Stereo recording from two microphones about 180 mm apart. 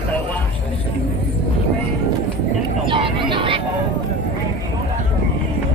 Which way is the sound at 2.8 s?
30° right (ahead or behind).